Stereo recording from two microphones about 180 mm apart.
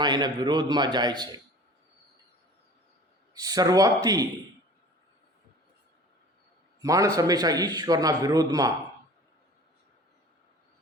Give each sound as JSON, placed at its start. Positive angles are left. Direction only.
{"t": 0.0, "sound": "a man's voice", "side_deg": -25}
{"t": 3.3, "sound": "a man's voice", "side_deg": -20}
{"t": 6.8, "sound": "a man's voice", "side_deg": -20}